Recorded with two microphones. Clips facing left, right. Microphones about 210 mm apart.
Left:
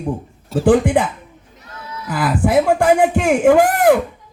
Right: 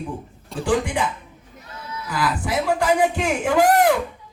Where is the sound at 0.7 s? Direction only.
55° left (ahead or behind).